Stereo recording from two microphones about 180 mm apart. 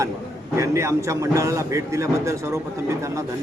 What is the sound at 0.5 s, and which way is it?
A man's voice, 15° right (ahead or behind).